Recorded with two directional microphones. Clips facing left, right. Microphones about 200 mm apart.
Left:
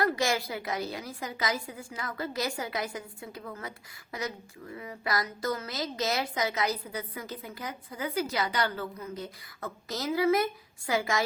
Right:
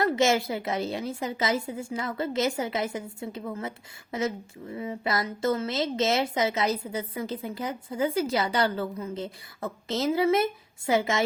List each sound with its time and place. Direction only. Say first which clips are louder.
0.0 s a woman's voice: right 5 dB; 25° right (ahead or behind)